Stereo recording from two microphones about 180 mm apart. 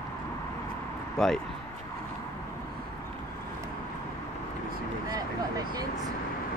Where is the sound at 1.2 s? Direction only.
5° left (ahead or behind).